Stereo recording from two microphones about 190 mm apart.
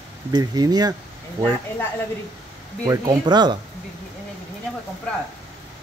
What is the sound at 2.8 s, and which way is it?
Speech, 20° right (ahead or behind).